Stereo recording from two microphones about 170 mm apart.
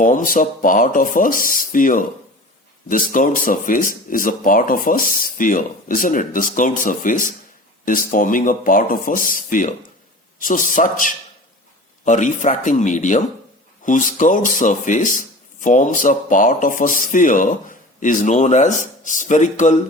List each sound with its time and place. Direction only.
0.0 s speech: 50° left (ahead or behind)